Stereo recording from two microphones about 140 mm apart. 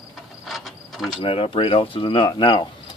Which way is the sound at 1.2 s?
40° left (ahead or behind).